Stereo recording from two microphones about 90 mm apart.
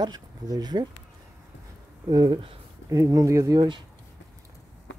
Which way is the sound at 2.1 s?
50° right (ahead or behind).